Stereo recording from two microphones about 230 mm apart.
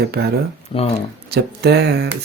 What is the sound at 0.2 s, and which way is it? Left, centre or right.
Speech, right.